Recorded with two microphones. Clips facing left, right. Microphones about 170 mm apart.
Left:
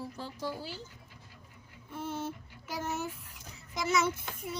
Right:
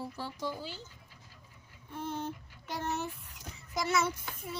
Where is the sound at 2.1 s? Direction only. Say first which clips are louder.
Even; 15° right (ahead or behind).